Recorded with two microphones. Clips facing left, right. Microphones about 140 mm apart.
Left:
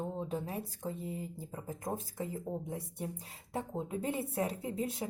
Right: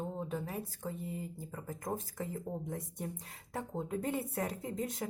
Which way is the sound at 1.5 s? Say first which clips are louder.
Even; 20° left (ahead or behind).